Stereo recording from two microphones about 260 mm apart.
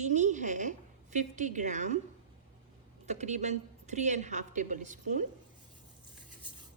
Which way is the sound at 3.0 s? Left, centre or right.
Right.